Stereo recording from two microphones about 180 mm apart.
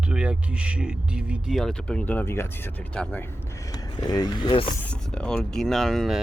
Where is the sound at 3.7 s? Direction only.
20° left (ahead or behind).